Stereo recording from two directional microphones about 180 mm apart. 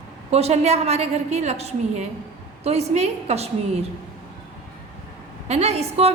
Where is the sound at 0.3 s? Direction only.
35° right (ahead or behind).